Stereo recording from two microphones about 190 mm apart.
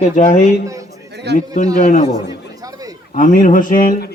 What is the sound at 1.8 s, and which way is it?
Speech, 35° left (ahead or behind).